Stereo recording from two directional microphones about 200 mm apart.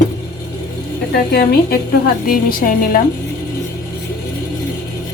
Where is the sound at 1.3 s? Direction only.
50° left (ahead or behind).